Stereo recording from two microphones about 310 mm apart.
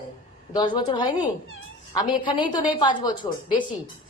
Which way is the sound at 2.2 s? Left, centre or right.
Centre.